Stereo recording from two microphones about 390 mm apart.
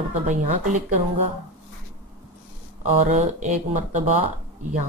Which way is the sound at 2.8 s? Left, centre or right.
Centre.